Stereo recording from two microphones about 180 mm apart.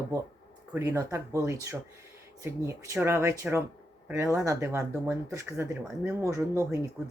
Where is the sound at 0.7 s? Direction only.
15° right (ahead or behind).